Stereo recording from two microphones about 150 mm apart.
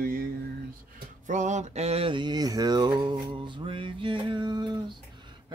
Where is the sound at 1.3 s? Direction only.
55° right (ahead or behind); by 4.8 s 30° right (ahead or behind).